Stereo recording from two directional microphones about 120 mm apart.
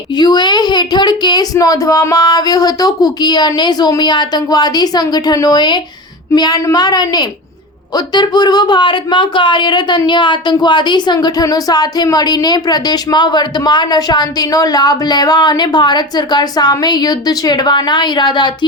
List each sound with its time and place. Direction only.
0.2 s speech: 35° left (ahead or behind)